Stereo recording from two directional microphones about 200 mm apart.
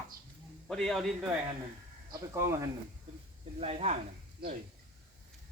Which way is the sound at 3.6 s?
30° right (ahead or behind).